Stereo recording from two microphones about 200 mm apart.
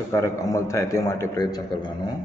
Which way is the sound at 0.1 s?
15° left (ahead or behind).